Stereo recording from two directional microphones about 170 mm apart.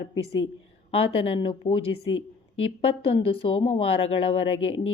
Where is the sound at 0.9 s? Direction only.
35° left (ahead or behind).